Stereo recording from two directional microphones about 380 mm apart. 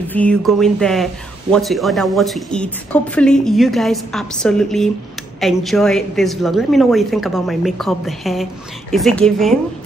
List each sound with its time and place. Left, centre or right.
0.1 s a woman's voice: centre